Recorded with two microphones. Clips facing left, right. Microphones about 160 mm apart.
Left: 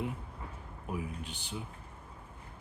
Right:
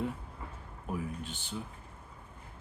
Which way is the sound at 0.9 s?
10° left (ahead or behind).